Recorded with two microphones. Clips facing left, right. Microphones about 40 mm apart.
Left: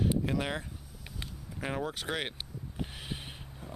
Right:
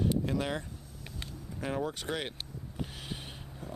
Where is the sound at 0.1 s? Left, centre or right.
Centre.